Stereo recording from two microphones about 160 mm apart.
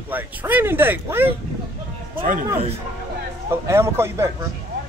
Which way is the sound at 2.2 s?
60° right (ahead or behind).